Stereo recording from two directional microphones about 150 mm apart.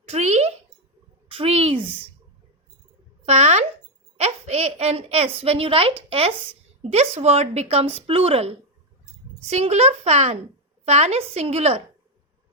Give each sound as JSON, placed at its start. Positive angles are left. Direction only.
{"t": 0.1, "sound": "a woman's voice", "side_deg": -45}
{"t": 3.2, "sound": "a woman's voice", "side_deg": -45}